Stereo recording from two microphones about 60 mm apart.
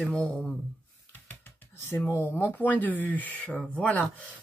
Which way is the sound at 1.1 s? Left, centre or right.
Left.